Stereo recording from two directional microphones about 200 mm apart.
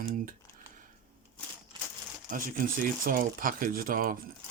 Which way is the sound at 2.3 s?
40° right (ahead or behind).